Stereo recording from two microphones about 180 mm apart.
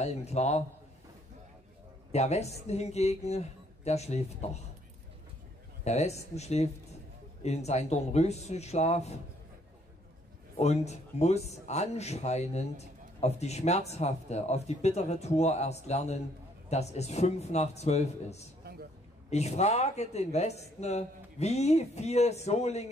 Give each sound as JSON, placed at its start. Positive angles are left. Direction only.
{"t": 0.0, "sound": "speech", "side_deg": 35}
{"t": 2.1, "sound": "speech", "side_deg": 35}
{"t": 5.9, "sound": "speech", "side_deg": 35}
{"t": 10.6, "sound": "speech", "side_deg": 35}
{"t": 18.6, "sound": "a sound", "side_deg": -60}
{"t": 19.3, "sound": "speech", "side_deg": 35}